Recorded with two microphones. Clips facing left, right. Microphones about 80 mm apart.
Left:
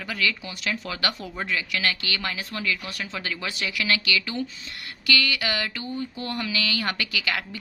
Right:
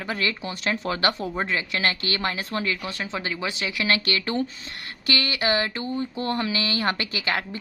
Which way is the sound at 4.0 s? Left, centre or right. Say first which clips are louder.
Right 2 dB; right.